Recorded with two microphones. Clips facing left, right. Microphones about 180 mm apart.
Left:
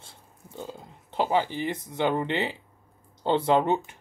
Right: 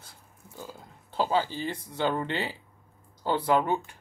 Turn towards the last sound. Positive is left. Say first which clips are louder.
# left 2 dB
turn(degrees=25)  # may be behind; listen again after turning